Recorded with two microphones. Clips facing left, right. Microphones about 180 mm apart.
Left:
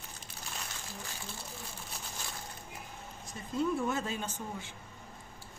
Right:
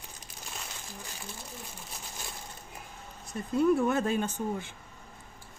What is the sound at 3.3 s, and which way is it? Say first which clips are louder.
A woman's voice: right 7 dB; 60° right (ahead or behind).